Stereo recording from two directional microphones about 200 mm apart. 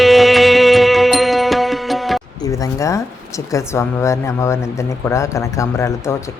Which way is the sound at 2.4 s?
15° left (ahead or behind).